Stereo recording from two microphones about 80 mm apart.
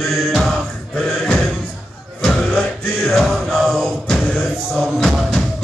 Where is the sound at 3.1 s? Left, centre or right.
Centre.